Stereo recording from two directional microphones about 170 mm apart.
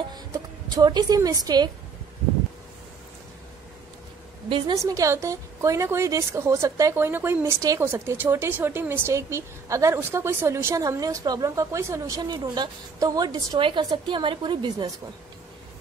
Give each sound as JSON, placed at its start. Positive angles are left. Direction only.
{"t": 0.1, "sound": "speech", "side_deg": -25}
{"t": 4.5, "sound": "a woman's voice", "side_deg": -30}